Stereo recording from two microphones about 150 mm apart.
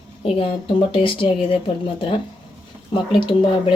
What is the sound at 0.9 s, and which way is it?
Speech, 35° left (ahead or behind).